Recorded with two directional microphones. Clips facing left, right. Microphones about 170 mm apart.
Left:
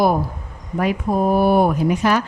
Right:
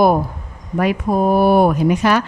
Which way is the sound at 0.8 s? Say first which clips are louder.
Right 2 dB; 75° right (ahead or behind).